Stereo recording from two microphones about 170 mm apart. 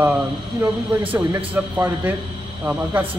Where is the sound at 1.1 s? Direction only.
10° right (ahead or behind).